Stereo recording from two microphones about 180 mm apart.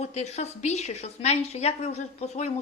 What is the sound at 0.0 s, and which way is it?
A woman's voice, 40° left (ahead or behind).